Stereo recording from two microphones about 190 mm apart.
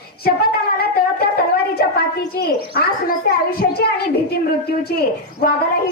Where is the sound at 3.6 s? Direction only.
55° left (ahead or behind).